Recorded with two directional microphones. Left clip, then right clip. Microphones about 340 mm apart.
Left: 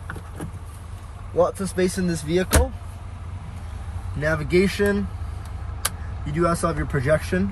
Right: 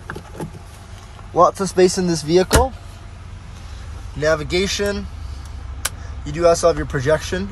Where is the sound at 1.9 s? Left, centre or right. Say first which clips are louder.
Right 6 dB; right.